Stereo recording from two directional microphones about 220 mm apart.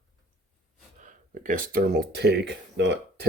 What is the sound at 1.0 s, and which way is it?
Speech, 35° right (ahead or behind).